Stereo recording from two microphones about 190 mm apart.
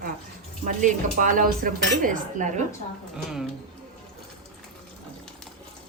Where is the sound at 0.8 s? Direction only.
45° right (ahead or behind).